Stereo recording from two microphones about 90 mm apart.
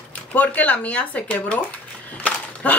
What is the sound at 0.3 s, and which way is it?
Speech, 15° left (ahead or behind).